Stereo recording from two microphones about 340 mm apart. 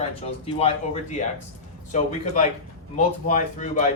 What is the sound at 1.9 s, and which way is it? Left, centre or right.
A man's voice, left.